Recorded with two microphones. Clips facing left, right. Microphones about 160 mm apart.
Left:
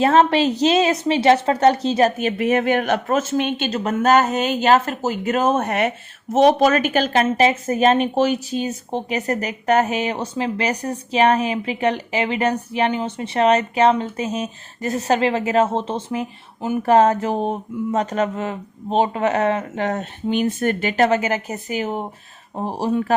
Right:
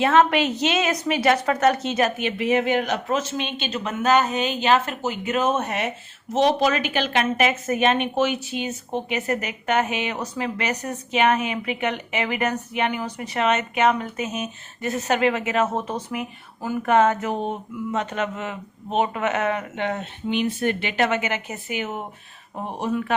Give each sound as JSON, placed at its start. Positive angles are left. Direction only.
{"t": 0.0, "sound": "speech", "side_deg": 35}